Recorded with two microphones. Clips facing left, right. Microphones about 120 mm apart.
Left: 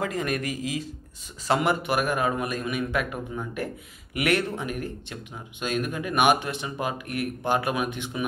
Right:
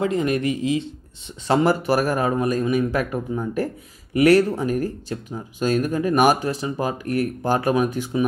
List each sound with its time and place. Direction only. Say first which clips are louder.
0.0 s speech: right 7 dB; 25° right (ahead or behind)